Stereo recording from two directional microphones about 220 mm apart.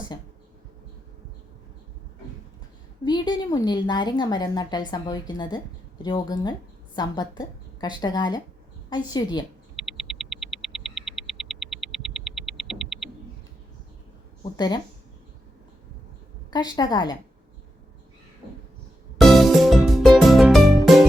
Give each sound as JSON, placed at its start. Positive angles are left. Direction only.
{"t": 3.0, "sound": "speech", "side_deg": 20}
{"t": 9.7, "sound": "mains hum", "side_deg": 0}
{"t": 14.5, "sound": "speech", "side_deg": 20}
{"t": 16.5, "sound": "speech", "side_deg": 20}
{"t": 19.2, "sound": "music", "side_deg": 0}